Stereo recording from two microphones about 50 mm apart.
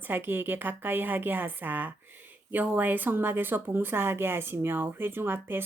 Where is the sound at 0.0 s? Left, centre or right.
Right.